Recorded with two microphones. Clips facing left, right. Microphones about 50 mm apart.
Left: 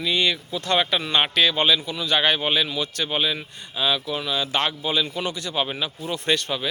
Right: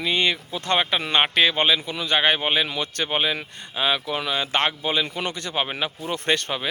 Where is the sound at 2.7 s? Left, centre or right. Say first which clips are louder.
Even; right.